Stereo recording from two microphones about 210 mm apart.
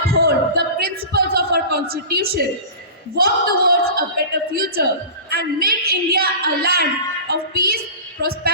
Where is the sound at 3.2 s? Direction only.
45° right (ahead or behind).